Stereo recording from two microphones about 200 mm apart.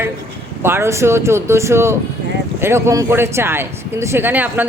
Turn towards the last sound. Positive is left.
turn(degrees=-10)  # may be behind; listen again after turning